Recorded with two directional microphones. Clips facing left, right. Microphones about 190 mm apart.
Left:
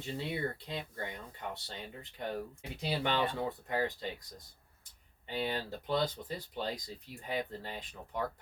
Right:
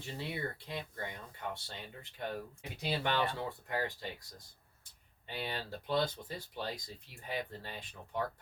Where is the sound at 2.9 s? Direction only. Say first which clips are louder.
Left 1 dB; 20° left (ahead or behind).